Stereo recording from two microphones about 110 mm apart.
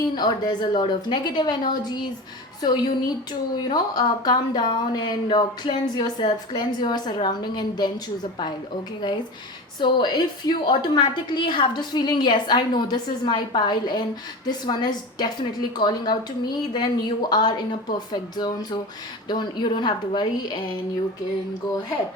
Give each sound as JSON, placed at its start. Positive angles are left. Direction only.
{"t": 0.2, "sound": "speech", "side_deg": 40}
{"t": 9.0, "sound": "a woman's voice", "side_deg": 45}